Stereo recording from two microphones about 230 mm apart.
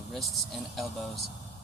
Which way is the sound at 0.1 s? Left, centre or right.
Centre.